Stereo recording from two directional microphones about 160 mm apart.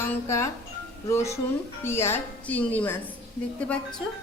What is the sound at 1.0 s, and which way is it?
A woman's voice, 20° left (ahead or behind).